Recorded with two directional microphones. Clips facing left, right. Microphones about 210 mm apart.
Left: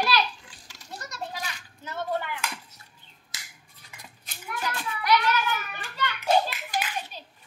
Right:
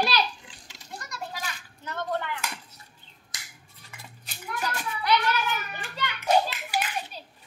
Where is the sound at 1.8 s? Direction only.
5° left (ahead or behind).